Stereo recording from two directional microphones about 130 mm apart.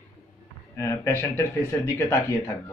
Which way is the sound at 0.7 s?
20° left (ahead or behind).